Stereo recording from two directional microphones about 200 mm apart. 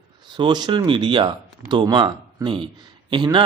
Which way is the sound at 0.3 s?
20° right (ahead or behind).